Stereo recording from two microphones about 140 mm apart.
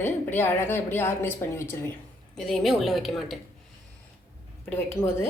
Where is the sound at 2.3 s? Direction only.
5° left (ahead or behind).